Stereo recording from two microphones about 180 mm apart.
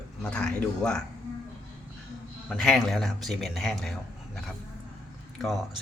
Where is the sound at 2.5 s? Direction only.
Centre (ahead or behind).